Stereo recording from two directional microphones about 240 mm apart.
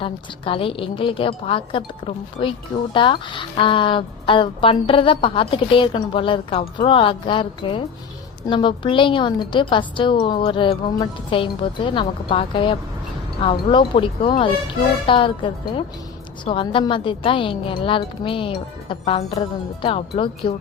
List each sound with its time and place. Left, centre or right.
0.0 s a woman's voice: left